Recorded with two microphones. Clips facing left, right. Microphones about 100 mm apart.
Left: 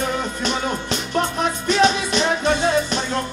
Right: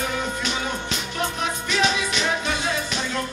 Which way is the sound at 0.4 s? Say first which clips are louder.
Left 4 dB; 40° left (ahead or behind).